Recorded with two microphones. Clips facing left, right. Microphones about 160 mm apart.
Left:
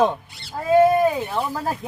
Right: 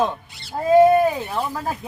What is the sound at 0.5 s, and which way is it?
Speech, 30° right (ahead or behind).